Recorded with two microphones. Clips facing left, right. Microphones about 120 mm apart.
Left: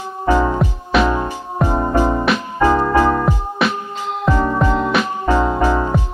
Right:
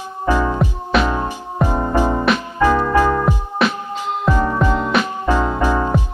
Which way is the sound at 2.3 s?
Centre (ahead or behind).